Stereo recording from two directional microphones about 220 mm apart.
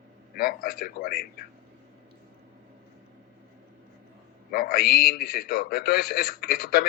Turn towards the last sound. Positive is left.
turn(degrees=40)  # may be behind; listen again after turning